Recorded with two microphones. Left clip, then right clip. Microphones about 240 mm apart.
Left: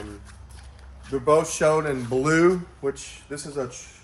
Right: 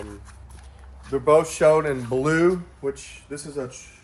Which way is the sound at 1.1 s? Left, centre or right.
Centre.